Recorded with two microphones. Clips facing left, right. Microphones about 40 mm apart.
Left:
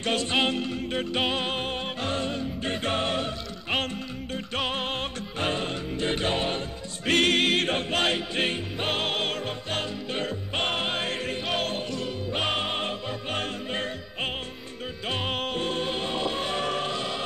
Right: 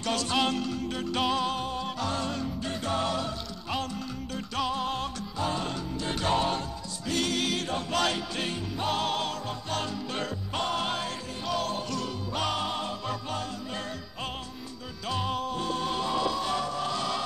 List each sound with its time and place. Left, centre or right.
0.0 s music: left
4.6 s music: left
7.1 s music: left
11.9 s music: left